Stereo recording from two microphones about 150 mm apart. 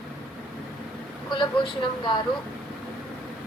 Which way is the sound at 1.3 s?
30° left (ahead or behind).